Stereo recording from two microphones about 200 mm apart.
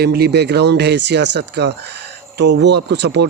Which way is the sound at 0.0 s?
55° right (ahead or behind).